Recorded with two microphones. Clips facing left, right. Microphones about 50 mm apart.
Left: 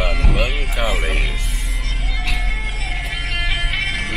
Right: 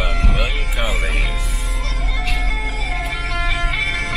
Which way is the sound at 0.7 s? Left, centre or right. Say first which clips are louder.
Left 2 dB; centre.